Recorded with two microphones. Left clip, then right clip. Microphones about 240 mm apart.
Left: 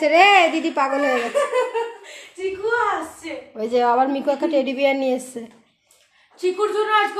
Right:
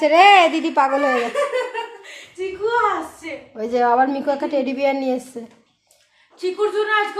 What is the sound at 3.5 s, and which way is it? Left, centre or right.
A woman's voice, centre.